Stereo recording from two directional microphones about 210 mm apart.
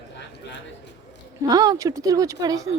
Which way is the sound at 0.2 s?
55° left (ahead or behind).